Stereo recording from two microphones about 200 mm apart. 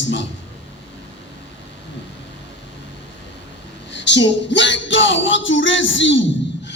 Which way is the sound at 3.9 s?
65° left (ahead or behind).